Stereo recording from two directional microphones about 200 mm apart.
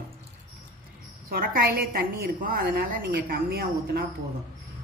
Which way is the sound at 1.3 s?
45° right (ahead or behind).